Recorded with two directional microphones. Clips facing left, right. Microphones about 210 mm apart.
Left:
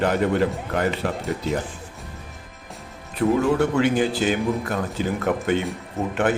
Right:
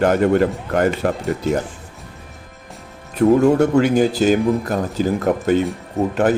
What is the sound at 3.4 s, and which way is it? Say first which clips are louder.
Speech: right 6 dB; 40° right (ahead or behind).